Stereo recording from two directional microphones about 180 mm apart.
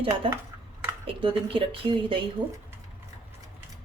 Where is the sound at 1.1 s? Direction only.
30° right (ahead or behind).